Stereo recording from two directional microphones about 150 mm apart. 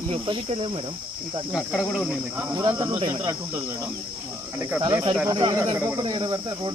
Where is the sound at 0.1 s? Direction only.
35° right (ahead or behind).